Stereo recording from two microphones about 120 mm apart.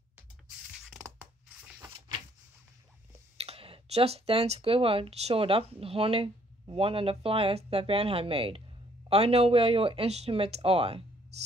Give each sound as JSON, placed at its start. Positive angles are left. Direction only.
{"t": 3.3, "sound": "speech", "side_deg": -55}